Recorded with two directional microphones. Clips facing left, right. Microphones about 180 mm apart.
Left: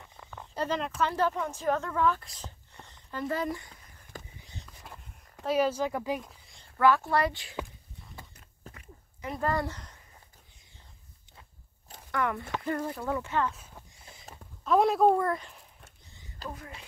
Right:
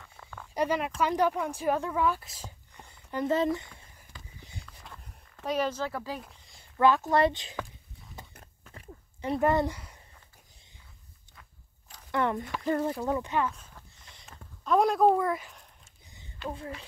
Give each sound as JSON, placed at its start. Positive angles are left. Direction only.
{"t": 0.2, "sound": "a sound", "side_deg": 10}
{"t": 0.6, "sound": "speech", "side_deg": -10}
{"t": 4.1, "sound": "walk", "side_deg": 45}
{"t": 5.4, "sound": "speech", "side_deg": 5}
{"t": 6.2, "sound": "a sound", "side_deg": -5}
{"t": 6.8, "sound": "speech", "side_deg": -20}
{"t": 8.7, "sound": "a sound", "side_deg": -30}
{"t": 9.4, "sound": "speech", "side_deg": -20}
{"t": 12.1, "sound": "speech", "side_deg": -25}
{"t": 14.3, "sound": "speech", "side_deg": 5}
{"t": 16.4, "sound": "speech", "side_deg": -30}